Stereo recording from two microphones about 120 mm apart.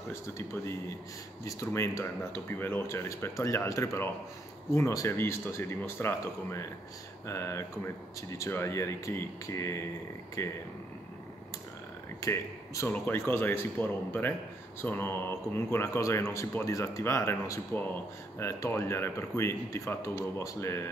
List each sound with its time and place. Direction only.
0.1 s speech: 20° left (ahead or behind)
12.2 s speech: 25° left (ahead or behind)